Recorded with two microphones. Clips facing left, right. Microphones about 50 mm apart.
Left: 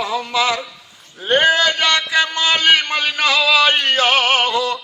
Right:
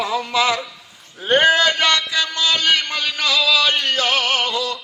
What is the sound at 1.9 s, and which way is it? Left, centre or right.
Music, left.